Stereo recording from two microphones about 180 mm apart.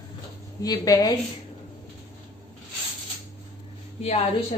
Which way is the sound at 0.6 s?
20° left (ahead or behind).